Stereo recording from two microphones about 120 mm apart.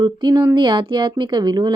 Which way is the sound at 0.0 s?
35° right (ahead or behind).